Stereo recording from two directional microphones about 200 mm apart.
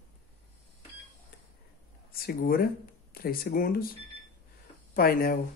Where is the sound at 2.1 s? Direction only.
50° left (ahead or behind).